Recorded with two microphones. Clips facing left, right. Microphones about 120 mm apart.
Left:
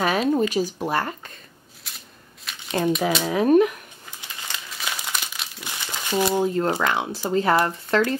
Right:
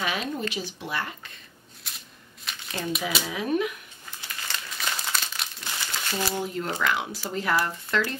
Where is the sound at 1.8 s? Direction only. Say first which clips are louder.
Left 1 dB; centre (ahead or behind).